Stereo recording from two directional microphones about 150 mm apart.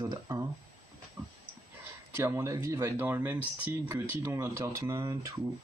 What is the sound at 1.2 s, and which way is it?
Dog, 20° right (ahead or behind).